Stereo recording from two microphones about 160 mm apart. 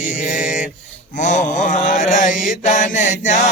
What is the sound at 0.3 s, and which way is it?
Mantra, 50° left (ahead or behind).